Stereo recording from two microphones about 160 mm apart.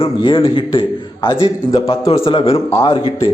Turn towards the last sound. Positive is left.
turn(degrees=30)  # may be behind; listen again after turning